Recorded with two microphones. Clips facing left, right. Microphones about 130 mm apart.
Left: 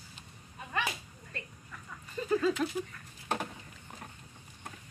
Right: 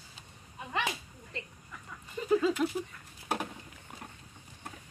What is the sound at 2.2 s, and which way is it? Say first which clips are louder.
Speech: right 2 dB; 15° right (ahead or behind).